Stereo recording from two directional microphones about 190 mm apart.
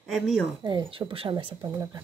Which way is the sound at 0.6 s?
25° right (ahead or behind).